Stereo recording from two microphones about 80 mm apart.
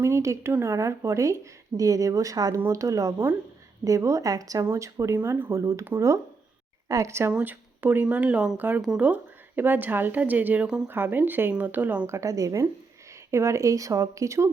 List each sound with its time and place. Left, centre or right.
0.0 s speech: right
6.8 s speech: right; by 10.8 s centre
10.8 s speech: right
12.0 s speech: right